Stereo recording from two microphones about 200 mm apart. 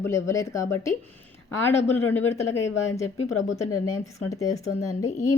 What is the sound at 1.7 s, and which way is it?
Speech, 35° left (ahead or behind).